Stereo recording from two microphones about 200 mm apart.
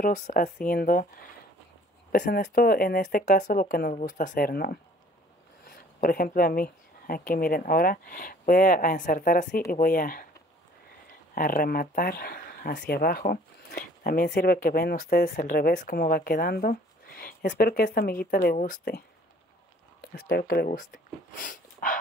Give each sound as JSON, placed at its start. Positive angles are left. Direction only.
{"t": 0.0, "sound": "speech", "side_deg": 45}
{"t": 2.1, "sound": "speech", "side_deg": 40}
{"t": 11.3, "sound": "speech", "side_deg": 45}